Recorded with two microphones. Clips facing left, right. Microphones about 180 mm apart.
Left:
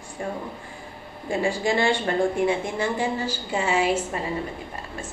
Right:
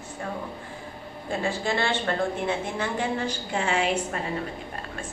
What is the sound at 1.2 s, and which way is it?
A woman's voice, 15° left (ahead or behind).